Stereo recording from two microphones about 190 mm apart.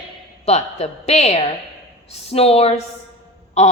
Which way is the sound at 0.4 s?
35° left (ahead or behind).